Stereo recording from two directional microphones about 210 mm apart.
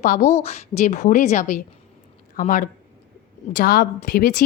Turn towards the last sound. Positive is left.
turn(degrees=45)  # may be behind; listen again after turning